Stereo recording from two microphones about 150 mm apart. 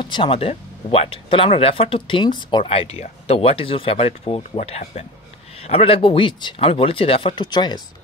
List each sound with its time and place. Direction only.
0.0 s speech: 35° left (ahead or behind)